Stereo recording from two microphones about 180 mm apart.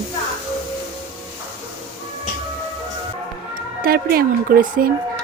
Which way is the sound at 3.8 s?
55° right (ahead or behind).